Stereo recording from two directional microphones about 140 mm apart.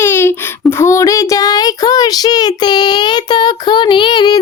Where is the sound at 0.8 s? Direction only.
20° left (ahead or behind).